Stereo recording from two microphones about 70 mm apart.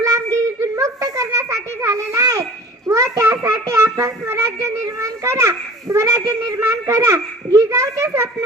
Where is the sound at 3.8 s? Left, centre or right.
Right.